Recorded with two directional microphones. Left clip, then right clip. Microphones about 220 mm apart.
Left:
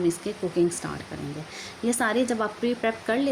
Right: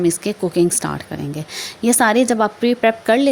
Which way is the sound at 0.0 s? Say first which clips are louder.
Right 8 dB; 35° right (ahead or behind).